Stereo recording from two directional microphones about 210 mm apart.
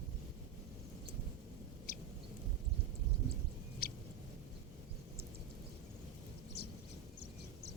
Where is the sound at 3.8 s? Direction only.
45° left (ahead or behind).